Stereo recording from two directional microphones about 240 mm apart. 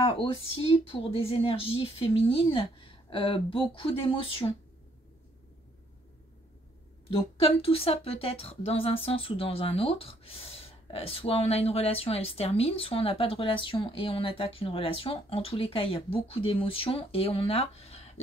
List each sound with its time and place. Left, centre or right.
0.1 s speech: left
7.1 s speech: left